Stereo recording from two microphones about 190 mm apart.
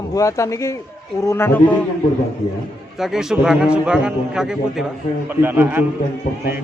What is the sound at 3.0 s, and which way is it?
A man's voice, centre (ahead or behind).